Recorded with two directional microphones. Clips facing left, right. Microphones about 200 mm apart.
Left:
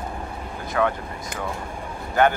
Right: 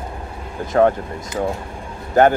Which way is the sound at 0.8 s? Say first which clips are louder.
Right 8 dB; 40° right (ahead or behind).